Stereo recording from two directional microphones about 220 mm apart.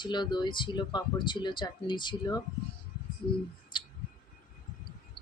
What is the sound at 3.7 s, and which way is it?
Clicking, 20° left (ahead or behind).